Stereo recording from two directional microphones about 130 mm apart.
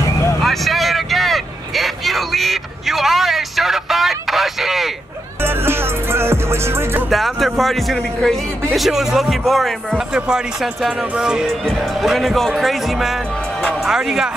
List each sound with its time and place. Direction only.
0.4 s vehicle: centre (ahead or behind)
5.4 s music: 20° right (ahead or behind)
7.1 s speech: centre (ahead or behind)